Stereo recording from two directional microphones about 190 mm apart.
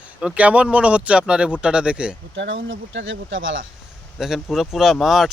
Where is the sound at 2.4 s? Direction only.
85° right.